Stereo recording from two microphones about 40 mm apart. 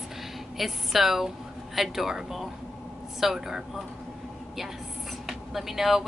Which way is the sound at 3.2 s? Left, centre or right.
Centre.